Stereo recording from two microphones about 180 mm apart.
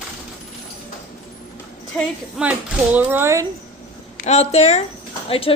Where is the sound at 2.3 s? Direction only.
10° right (ahead or behind).